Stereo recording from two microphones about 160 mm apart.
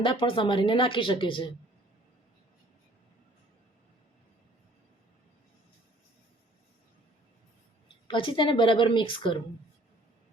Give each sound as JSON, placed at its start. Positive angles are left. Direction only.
{"t": 0.0, "sound": "speech", "side_deg": 30}
{"t": 8.0, "sound": "speech", "side_deg": 30}